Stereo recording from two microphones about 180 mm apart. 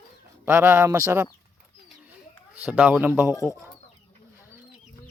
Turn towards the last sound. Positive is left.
turn(degrees=15)  # may be behind; listen again after turning